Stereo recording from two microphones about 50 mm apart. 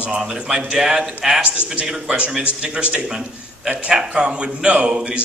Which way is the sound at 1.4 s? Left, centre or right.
Right.